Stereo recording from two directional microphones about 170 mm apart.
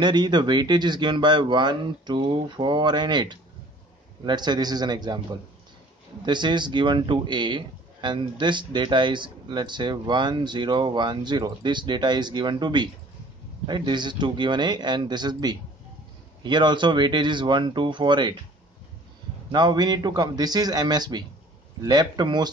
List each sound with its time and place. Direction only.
0.0 s speech: 25° right (ahead or behind)
19.5 s speech: 25° right (ahead or behind)